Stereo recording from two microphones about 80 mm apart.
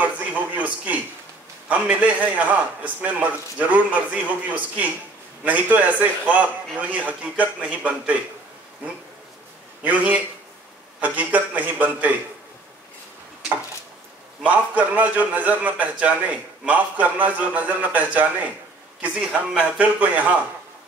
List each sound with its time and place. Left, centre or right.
0.0 s a sound: centre
1.7 s a man's voice: centre
9.8 s a man's voice: centre
14.4 s a man's voice: centre
19.5 s a man's voice: centre